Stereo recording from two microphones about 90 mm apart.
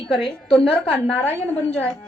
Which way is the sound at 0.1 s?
5° left (ahead or behind).